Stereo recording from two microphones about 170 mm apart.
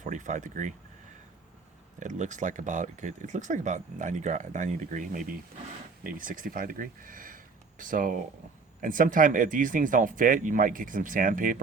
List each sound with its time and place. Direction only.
0.0 s speech: 45° right (ahead or behind)
2.0 s speech: 45° right (ahead or behind)